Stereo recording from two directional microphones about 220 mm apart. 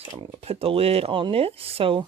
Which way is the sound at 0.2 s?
25° right (ahead or behind).